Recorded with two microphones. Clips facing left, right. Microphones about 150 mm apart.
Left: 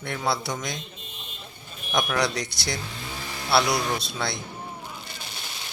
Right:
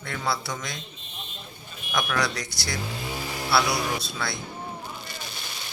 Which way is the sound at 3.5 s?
20° left (ahead or behind).